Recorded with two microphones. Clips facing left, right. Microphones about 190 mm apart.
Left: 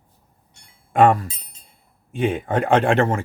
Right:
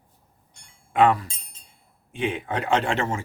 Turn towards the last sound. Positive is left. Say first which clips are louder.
# left 6 dB
turn(degrees=55)  # may be behind; listen again after turning